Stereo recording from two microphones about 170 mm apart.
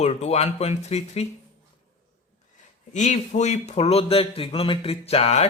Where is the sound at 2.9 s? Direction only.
45° left (ahead or behind).